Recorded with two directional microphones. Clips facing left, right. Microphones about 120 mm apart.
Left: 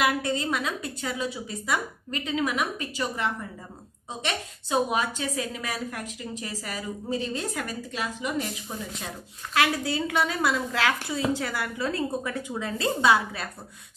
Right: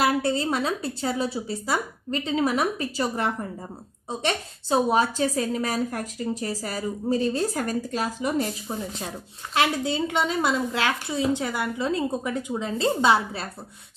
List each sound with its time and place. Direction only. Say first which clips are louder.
0.0 s a woman's voice: right 3 dB; 30° right (ahead or behind)
9.5 s a woman's voice: right 2 dB; 25° right (ahead or behind)